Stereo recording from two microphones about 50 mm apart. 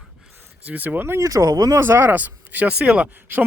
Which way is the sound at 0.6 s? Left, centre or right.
Right.